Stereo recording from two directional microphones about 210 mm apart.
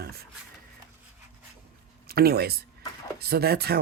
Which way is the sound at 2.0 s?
45° right (ahead or behind).